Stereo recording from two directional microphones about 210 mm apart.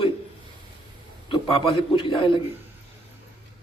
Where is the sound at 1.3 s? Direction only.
25° left (ahead or behind).